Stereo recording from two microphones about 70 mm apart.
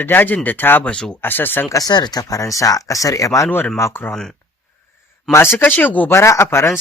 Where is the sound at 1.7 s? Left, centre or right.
Left.